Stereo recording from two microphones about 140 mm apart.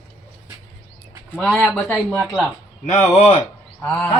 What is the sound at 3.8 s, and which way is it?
Speech, 5° left (ahead or behind).